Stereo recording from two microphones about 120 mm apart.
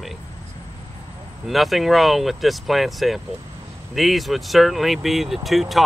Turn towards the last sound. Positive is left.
turn(degrees=0)  # may be behind; listen again after turning